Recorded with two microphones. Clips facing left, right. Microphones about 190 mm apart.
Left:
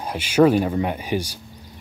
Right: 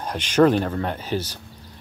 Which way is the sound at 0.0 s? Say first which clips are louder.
Left 1 dB; 10° left (ahead or behind).